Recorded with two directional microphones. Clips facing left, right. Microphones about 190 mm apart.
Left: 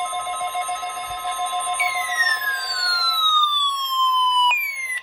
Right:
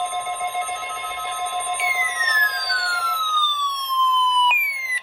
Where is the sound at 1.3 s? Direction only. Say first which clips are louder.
Left 1 dB; 15° right (ahead or behind).